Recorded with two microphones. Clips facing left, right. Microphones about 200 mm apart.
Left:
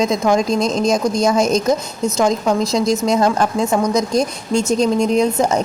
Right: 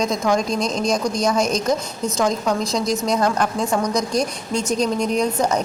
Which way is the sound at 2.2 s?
25° left (ahead or behind).